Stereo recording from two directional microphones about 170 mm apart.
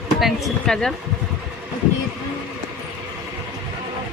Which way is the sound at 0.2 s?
Centre (ahead or behind).